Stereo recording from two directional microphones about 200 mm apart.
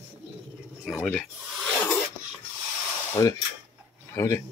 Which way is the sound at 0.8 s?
5° left (ahead or behind).